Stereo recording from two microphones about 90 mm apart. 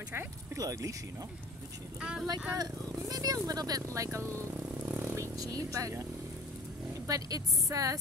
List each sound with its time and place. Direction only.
0.6 s a woman's voice: 40° right (ahead or behind)
2.0 s speech: 10° right (ahead or behind)
2.5 s speech: 45° right (ahead or behind)
4.4 s vehicle: 20° right (ahead or behind)
5.1 s speech: 35° right (ahead or behind)
7.1 s a woman's voice: 40° right (ahead or behind)